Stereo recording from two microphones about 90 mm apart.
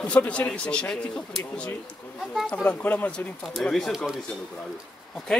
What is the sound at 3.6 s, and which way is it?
Speech, 5° left (ahead or behind).